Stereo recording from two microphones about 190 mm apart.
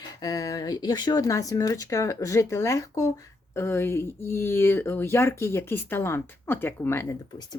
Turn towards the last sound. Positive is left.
turn(degrees=10)  # may be behind; listen again after turning